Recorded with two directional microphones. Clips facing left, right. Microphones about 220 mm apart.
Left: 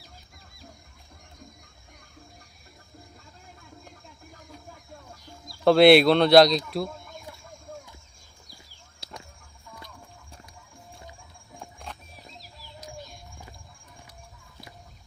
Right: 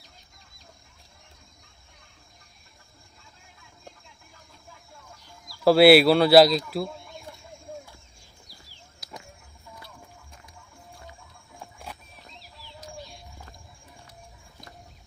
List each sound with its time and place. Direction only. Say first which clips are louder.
5.6 s speech: even; 5° right (ahead or behind)
9.0 s chicken: even; 25° left (ahead or behind)
11.6 s music: even; 5° right (ahead or behind)